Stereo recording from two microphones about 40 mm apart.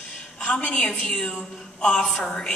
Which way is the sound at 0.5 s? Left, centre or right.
Left.